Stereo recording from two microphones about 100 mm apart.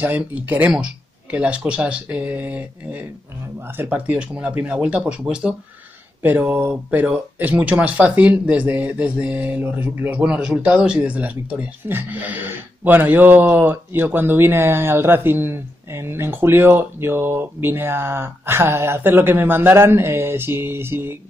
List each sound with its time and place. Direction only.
0.0 s speech: 15° right (ahead or behind)